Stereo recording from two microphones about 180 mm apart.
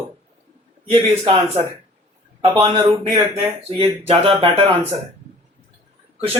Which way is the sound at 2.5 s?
30° right (ahead or behind).